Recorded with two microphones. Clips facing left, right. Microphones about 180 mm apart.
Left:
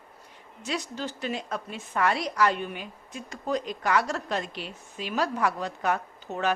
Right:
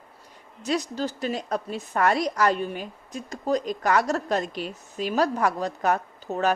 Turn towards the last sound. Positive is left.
turn(degrees=-40)  # may be behind; listen again after turning